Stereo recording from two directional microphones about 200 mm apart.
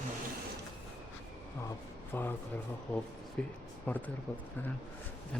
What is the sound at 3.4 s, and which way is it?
Speech, 5° left (ahead or behind).